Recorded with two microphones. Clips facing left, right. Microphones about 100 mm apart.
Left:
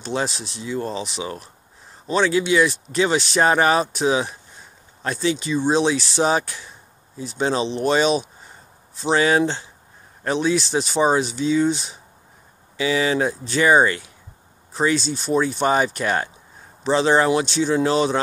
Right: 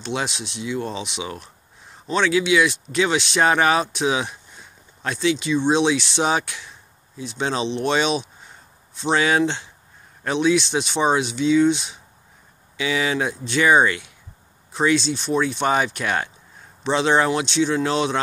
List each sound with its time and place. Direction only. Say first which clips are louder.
0.0 s speech: left 2 dB; centre (ahead or behind)
0.5 s speech: right 1 dB; 40° left (ahead or behind)
0.7 s speech: left 4 dB; centre (ahead or behind)